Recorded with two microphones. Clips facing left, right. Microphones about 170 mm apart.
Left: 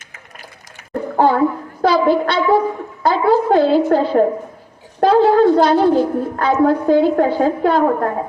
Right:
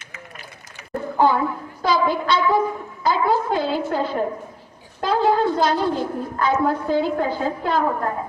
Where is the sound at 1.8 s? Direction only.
70° left (ahead or behind).